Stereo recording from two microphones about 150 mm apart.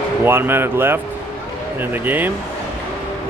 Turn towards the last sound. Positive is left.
turn(degrees=-10)  # may be behind; listen again after turning